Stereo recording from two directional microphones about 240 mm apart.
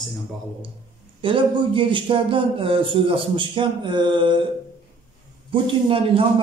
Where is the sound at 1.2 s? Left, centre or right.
Right.